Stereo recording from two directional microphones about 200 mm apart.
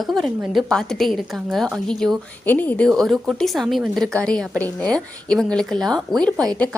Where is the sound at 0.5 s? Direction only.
Centre (ahead or behind).